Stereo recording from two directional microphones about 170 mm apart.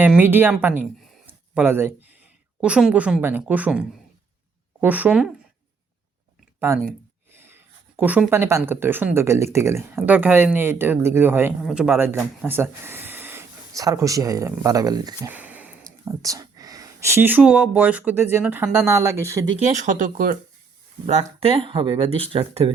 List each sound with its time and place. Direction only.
0.0 s speech: 10° right (ahead or behind)
1.3 s a sound: 10° right (ahead or behind)
2.6 s speech: 5° right (ahead or behind)
6.7 s speech: 15° right (ahead or behind)
15.3 s a sound: 10° right (ahead or behind)
16.0 s speech: 20° right (ahead or behind)
19.5 s speech: 45° right (ahead or behind)
21.4 s speech: 35° right (ahead or behind)